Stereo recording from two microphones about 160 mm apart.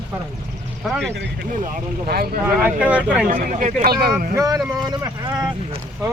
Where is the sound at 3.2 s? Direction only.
60° right (ahead or behind).